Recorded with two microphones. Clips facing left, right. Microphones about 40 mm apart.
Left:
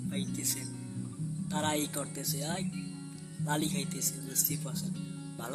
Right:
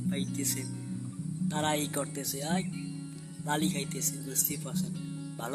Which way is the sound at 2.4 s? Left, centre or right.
Right.